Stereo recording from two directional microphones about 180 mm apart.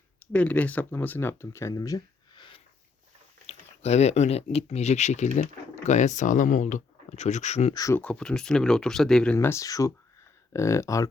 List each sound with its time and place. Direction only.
0.2 s speech: 10° left (ahead or behind); by 2.6 s 25° left (ahead or behind)
3.4 s speech: 35° left (ahead or behind)
7.7 s speech: 20° left (ahead or behind)